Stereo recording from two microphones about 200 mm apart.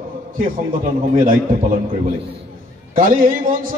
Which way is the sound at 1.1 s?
45° right (ahead or behind).